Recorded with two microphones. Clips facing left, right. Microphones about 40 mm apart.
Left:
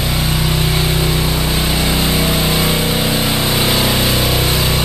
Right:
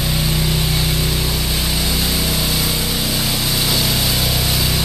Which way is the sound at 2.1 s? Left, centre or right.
Left.